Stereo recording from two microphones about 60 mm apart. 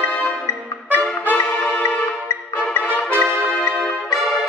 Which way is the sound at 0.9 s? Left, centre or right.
Left.